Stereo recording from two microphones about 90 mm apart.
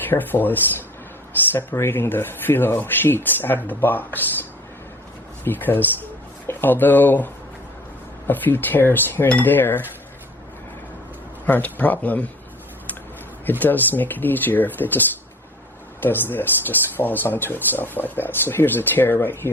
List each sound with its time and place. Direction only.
0.1 s speech: 20° left (ahead or behind)
5.5 s speech: 20° left (ahead or behind)
8.3 s speech: 20° left (ahead or behind)
11.4 s speech: 20° left (ahead or behind)
13.4 s speech: 20° left (ahead or behind)